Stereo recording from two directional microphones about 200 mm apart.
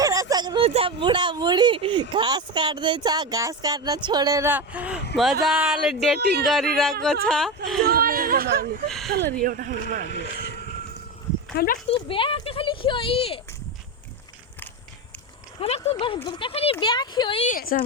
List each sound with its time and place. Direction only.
0.0 s speech: 15° right (ahead or behind); by 7.9 s centre (ahead or behind)
7.9 s a sound: 50° right (ahead or behind)
8.9 s speech: centre (ahead or behind)
9.1 s speech: 50° right (ahead or behind)
10.1 s speech: 60° left (ahead or behind)
11.5 s a woman's voice: 45° left (ahead or behind)
11.9 s speech: 25° left (ahead or behind)
15.6 s speech: 30° left (ahead or behind)
17.4 s a woman's voice: 45° left (ahead or behind)